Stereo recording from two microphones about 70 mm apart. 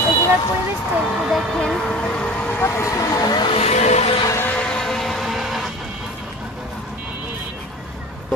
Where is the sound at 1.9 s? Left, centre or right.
Centre.